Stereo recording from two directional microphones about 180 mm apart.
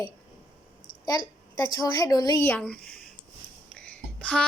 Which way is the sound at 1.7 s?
20° left (ahead or behind).